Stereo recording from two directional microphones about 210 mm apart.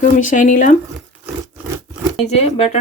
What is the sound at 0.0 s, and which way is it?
Speech, 40° left (ahead or behind).